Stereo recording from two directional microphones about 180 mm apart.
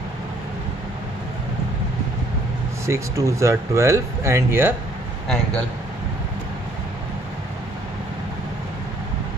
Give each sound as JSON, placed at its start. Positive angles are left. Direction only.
{"t": 2.9, "sound": "speech", "side_deg": -15}